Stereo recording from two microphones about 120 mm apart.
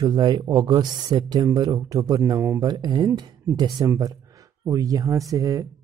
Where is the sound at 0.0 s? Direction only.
35° right (ahead or behind).